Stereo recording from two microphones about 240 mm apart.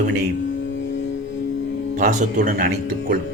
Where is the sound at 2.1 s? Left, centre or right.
Right.